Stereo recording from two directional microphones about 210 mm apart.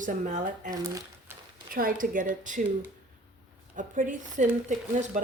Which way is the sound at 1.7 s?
40° right (ahead or behind).